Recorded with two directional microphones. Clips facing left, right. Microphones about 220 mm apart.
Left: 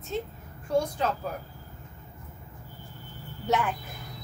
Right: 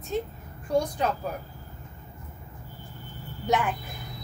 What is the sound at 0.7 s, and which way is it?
Speech, 15° right (ahead or behind).